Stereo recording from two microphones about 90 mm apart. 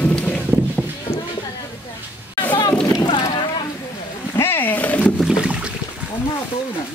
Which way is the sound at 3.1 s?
70° left (ahead or behind).